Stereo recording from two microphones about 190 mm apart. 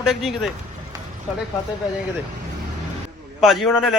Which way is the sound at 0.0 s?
Centre (ahead or behind).